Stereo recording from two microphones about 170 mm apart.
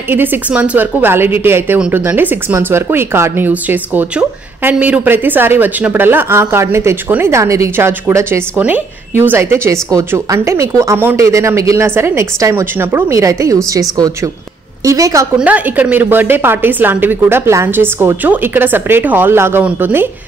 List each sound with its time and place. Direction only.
0.1 s a woman's voice: 10° right (ahead or behind)
15.3 s a woman's voice: 10° right (ahead or behind)